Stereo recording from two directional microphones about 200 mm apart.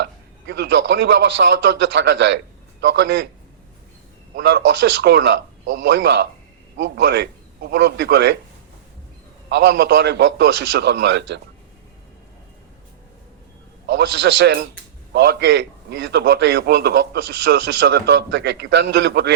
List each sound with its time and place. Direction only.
0.0 s a man's voice: 60° right (ahead or behind)
4.4 s a man's voice: 60° right (ahead or behind)
9.5 s a man's voice: 60° right (ahead or behind)
13.8 s a man's voice: 60° right (ahead or behind)